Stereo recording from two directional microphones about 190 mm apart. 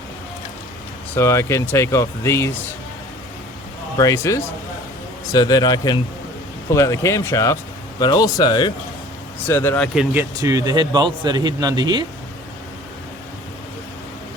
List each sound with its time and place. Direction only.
1.1 s speech: 15° left (ahead or behind)
3.9 s speech: 15° left (ahead or behind)
9.5 s a man's voice: 10° left (ahead or behind); by 12.0 s 20° right (ahead or behind)